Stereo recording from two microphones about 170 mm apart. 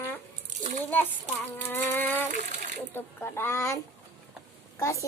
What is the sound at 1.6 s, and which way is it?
A child's voice, 10° left (ahead or behind).